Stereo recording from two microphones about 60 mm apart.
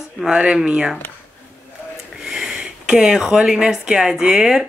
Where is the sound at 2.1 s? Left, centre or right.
Centre.